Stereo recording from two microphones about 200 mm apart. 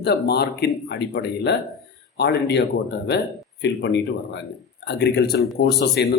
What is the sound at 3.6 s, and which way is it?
Speech, 60° left (ahead or behind).